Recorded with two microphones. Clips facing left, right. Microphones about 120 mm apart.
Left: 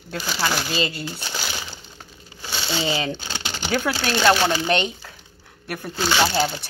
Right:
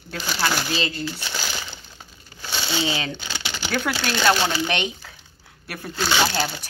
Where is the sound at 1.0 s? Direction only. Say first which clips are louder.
Right 1 dB; 20° left (ahead or behind).